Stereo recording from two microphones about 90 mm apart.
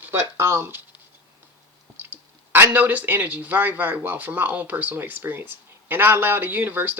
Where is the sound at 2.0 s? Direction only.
25° right (ahead or behind).